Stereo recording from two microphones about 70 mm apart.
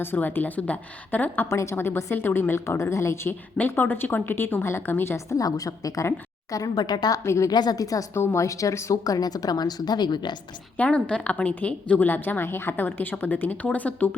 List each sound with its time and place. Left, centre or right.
0.0 s a woman's voice: left
1.5 s a woman's voice: left
1.7 s a woman's voice: left
3.6 s a woman's voice: left
5.1 s a woman's voice: left
5.5 s speech: left
6.5 s speech: left
7.3 s a woman's voice: left
7.5 s speech: left
8.1 s a woman's voice: left
8.4 s speech: left
10.8 s a woman's voice: centre